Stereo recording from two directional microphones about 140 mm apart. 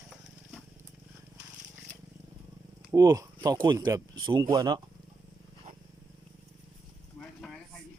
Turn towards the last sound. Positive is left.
turn(degrees=0)  # may be behind; listen again after turning